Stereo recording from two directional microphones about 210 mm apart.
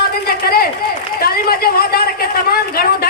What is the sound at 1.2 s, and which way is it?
Speech, 45° left (ahead or behind).